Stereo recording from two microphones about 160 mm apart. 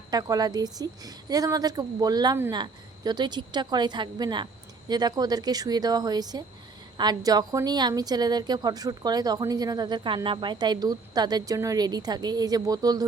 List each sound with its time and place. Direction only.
0.1 s a woman's voice: 25° right (ahead or behind)